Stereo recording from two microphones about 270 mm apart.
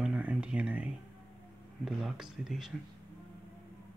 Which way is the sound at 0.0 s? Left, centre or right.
Centre.